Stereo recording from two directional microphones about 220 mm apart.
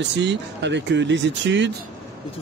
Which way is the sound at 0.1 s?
50° right (ahead or behind).